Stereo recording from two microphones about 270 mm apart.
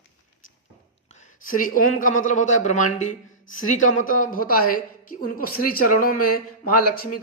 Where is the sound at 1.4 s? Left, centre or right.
Left.